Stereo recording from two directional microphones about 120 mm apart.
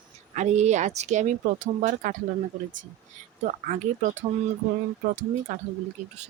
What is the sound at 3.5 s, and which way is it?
Speech, 90° right.